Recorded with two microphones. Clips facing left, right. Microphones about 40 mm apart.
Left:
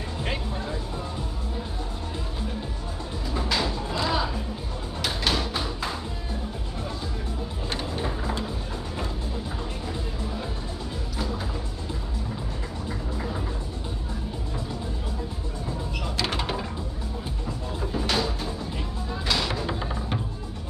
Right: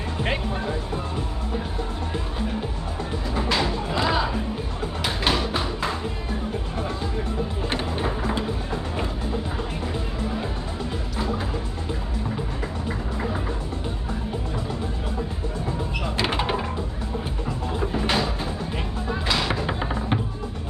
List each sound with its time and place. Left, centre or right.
0.2 s speech: right
3.3 s music: right
5.0 s a sound: right
7.7 s music: right
11.1 s music: right
12.8 s music: right
16.2 s door: right
17.7 s music: right